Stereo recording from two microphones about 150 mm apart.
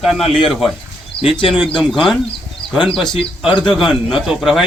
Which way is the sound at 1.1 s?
35° left (ahead or behind).